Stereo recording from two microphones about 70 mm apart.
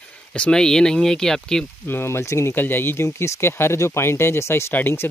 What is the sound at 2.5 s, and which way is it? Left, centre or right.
Speech, left.